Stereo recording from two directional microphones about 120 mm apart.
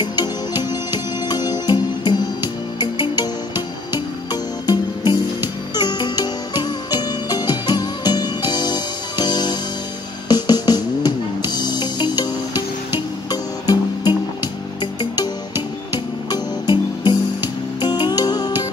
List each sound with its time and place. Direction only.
0.0 s music: 35° left (ahead or behind)